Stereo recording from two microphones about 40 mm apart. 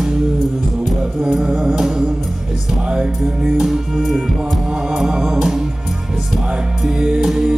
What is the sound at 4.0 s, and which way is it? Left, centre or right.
Music, centre.